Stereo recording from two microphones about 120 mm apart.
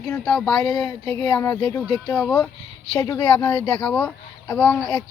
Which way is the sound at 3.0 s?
25° left (ahead or behind).